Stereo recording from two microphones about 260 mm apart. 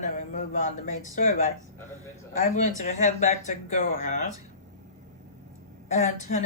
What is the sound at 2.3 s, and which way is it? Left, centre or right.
Speech, left.